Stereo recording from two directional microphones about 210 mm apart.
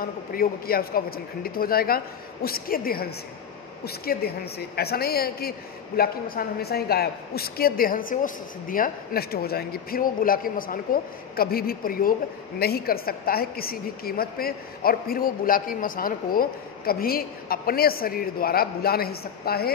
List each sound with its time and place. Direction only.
0.3 s a woman's voice: 45° left (ahead or behind)